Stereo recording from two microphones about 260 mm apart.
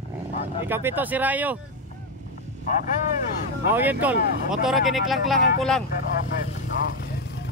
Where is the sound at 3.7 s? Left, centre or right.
Centre.